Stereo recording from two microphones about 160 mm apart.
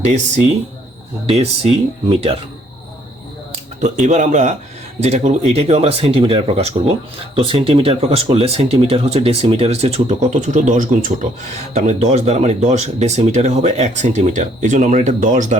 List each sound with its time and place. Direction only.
1.3 s speech: 40° right (ahead or behind)
3.8 s speech: 50° right (ahead or behind)